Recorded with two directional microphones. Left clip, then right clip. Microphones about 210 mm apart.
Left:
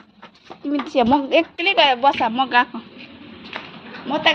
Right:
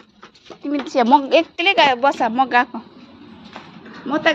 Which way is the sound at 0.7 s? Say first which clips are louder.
Right 2 dB; 10° right (ahead or behind).